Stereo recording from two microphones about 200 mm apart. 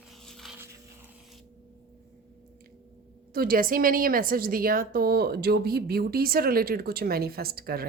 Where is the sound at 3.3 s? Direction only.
45° right (ahead or behind).